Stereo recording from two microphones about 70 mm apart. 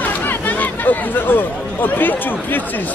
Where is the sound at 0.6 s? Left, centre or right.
Left.